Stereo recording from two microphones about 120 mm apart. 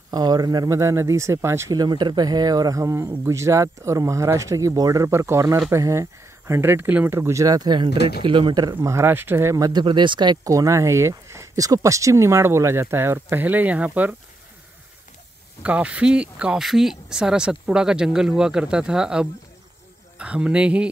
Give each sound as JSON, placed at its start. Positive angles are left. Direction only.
{"t": 0.1, "sound": "speech", "side_deg": -35}
{"t": 1.8, "sound": "speech", "side_deg": -35}
{"t": 8.7, "sound": "speech", "side_deg": -20}
{"t": 9.7, "sound": "speech", "side_deg": -40}
{"t": 15.6, "sound": "speech", "side_deg": -10}